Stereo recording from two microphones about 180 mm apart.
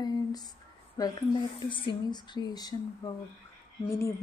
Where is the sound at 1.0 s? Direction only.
20° left (ahead or behind).